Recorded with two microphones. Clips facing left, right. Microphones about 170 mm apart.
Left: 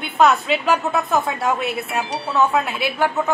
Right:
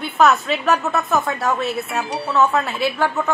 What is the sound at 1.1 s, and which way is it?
Speech, 25° left (ahead or behind).